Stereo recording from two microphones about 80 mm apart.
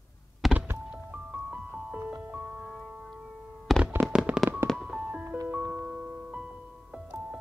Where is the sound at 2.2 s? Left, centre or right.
Right.